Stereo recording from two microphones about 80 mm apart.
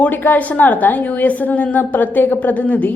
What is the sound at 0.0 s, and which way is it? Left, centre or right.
A woman's voice, left.